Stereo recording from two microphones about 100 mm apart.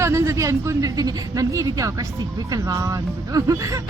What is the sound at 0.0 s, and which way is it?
A woman's voice, 30° right (ahead or behind).